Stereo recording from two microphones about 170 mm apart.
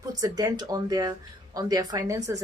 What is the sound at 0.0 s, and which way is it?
Speech, 20° right (ahead or behind).